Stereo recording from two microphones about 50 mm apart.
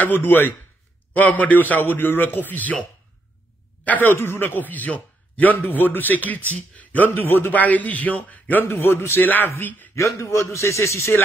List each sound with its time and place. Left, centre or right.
0.0 s a man's voice: left
3.8 s a man's voice: left
4.2 s a man's voice: left
7.2 s speech: left
7.5 s a man's voice: left
9.9 s a man's voice: left